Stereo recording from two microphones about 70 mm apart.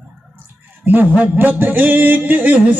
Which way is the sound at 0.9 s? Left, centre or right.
Right.